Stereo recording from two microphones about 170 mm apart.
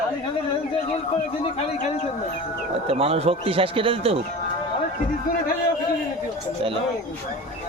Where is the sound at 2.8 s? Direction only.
35° right (ahead or behind).